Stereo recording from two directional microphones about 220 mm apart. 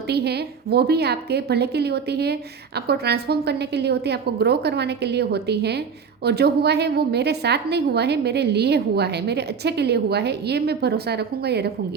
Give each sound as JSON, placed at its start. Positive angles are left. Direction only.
{"t": 0.1, "sound": "a woman's voice", "side_deg": -50}